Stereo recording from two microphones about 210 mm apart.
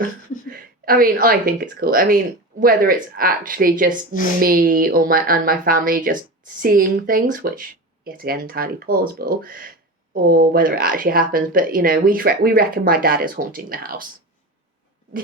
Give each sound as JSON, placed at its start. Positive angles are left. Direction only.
{"t": 0.5, "sound": "speech", "side_deg": -45}